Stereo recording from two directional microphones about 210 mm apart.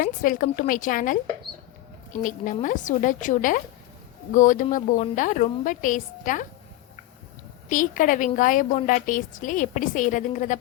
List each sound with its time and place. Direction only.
0.0 s a woman's voice: 40° left (ahead or behind)
7.7 s a woman's voice: 40° left (ahead or behind)